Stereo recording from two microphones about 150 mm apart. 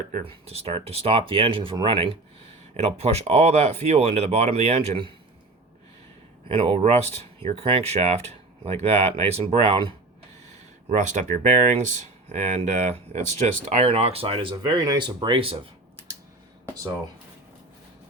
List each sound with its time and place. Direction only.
0.3 s speech: 40° right (ahead or behind)
2.8 s speech: 45° right (ahead or behind)
6.5 s speech: 40° right (ahead or behind)
10.8 s speech: 55° right (ahead or behind)
14.5 s speech: 25° right (ahead or behind)